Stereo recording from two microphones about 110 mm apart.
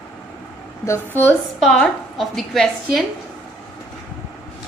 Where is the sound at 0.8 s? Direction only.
25° left (ahead or behind).